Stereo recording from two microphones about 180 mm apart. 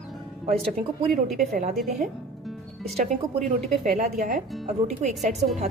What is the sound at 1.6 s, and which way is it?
Speech, 45° right (ahead or behind).